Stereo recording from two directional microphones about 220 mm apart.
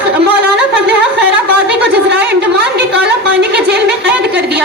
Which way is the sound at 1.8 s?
50° right (ahead or behind).